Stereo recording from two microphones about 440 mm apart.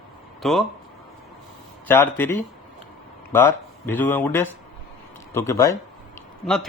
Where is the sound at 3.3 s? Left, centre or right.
Centre.